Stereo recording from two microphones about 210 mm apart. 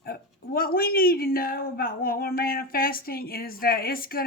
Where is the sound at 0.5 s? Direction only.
45° left (ahead or behind).